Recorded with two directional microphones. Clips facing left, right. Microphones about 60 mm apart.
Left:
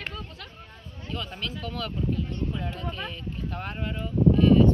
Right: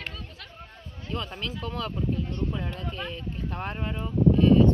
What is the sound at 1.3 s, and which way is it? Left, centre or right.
Speech, right.